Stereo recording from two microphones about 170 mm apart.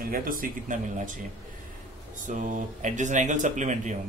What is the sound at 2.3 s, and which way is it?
Speech, 50° right (ahead or behind).